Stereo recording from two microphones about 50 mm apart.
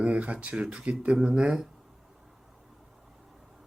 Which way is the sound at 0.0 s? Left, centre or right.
Right.